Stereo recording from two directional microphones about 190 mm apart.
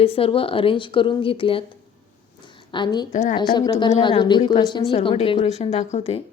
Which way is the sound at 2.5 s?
25° left (ahead or behind).